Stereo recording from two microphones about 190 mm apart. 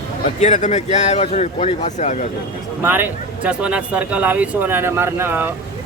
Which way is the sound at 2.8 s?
10° right (ahead or behind).